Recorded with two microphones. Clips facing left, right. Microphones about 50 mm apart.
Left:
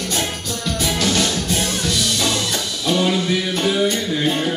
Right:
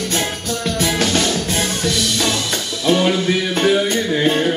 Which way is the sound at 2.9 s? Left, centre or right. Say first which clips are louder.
Right 3 dB; right.